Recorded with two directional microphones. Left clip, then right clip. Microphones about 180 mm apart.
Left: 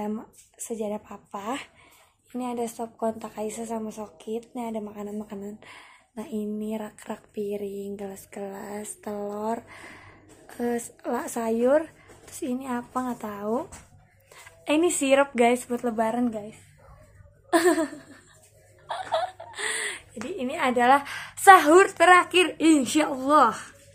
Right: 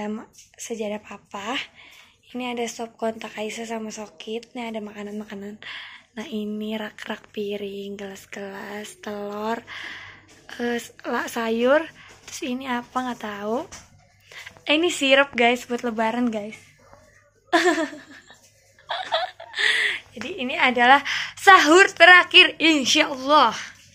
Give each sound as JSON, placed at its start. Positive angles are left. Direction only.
{"t": 0.0, "sound": "a woman's voice", "side_deg": 0}
{"t": 14.3, "sound": "a sound", "side_deg": 10}
{"t": 15.3, "sound": "a woman's voice", "side_deg": 10}
{"t": 16.3, "sound": "speech", "side_deg": -15}
{"t": 17.5, "sound": "a woman's voice", "side_deg": 5}
{"t": 18.9, "sound": "chuckle", "side_deg": 10}
{"t": 20.2, "sound": "a woman's voice", "side_deg": 5}